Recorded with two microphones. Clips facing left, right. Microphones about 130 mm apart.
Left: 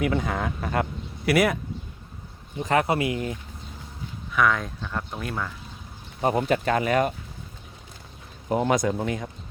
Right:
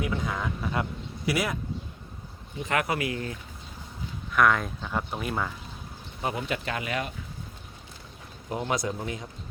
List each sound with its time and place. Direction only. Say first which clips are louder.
0.0 s speech: left 5 dB; 65° left (ahead or behind)
2.6 s speech: left 5 dB; 35° left (ahead or behind)
4.3 s speech: even; centre (ahead or behind)
6.2 s speech: left 8 dB; 40° left (ahead or behind)
8.4 s speech: left 7 dB; 50° left (ahead or behind)